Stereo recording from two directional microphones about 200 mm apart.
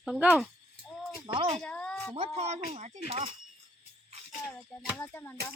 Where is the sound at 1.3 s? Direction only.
25° right (ahead or behind).